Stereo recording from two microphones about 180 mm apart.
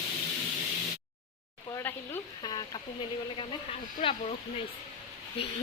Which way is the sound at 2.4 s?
25° left (ahead or behind).